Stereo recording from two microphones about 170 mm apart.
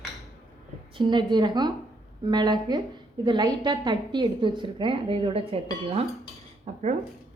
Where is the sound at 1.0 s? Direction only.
25° right (ahead or behind).